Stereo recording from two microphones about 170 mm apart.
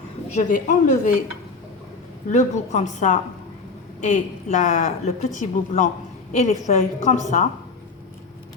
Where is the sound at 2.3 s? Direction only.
45° left (ahead or behind).